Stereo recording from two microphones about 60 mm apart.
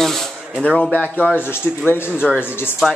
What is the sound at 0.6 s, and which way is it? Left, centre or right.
Speech, centre.